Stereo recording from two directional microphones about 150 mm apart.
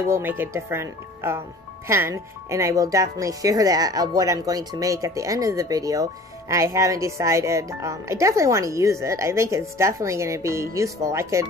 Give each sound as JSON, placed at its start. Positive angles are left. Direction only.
{"t": 0.1, "sound": "speech", "side_deg": -15}